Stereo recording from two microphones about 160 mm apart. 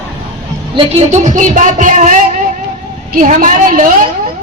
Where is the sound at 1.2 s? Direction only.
50° right (ahead or behind).